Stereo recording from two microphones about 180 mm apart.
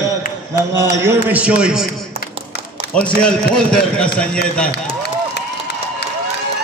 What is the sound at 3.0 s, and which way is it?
A man's voice, 5° left (ahead or behind).